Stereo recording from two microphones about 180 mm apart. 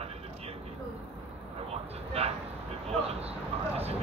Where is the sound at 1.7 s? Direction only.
35° right (ahead or behind).